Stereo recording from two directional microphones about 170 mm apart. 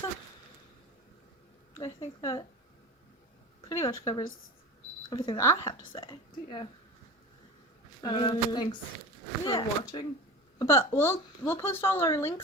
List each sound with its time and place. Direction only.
1.8 s a woman's voice: 20° left (ahead or behind)
3.7 s a woman's voice: 20° left (ahead or behind)
5.0 s speech: 30° left (ahead or behind)
5.4 s a woman's voice: 20° left (ahead or behind)
8.0 s a woman's voice: 25° left (ahead or behind)
10.6 s speech: 15° left (ahead or behind)